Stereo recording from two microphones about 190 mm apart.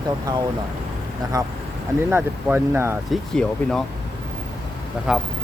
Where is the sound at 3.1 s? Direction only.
5° left (ahead or behind).